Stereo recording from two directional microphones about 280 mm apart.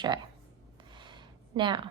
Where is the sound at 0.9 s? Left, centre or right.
Centre.